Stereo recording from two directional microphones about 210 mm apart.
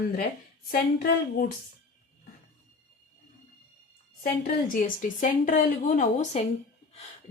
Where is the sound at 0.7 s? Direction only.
45° left (ahead or behind).